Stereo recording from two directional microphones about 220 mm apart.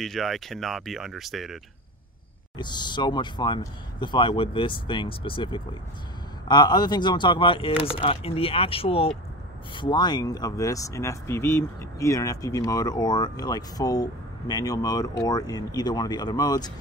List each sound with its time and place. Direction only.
0.0 s speech: centre (ahead or behind)
2.5 s speech: 20° left (ahead or behind)